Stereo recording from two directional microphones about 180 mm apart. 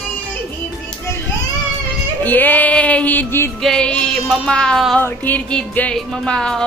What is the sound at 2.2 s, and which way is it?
Speech, 10° left (ahead or behind).